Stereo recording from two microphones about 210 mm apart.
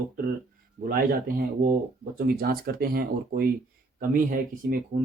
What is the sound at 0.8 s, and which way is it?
Speech, 45° right (ahead or behind).